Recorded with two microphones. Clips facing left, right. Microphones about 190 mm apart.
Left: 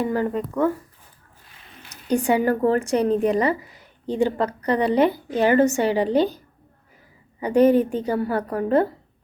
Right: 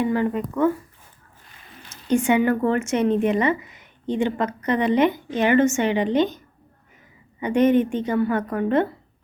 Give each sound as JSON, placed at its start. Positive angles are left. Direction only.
{"t": 0.0, "sound": "a woman's voice", "side_deg": 40}
{"t": 1.9, "sound": "a woman's voice", "side_deg": 35}
{"t": 7.4, "sound": "a woman's voice", "side_deg": 35}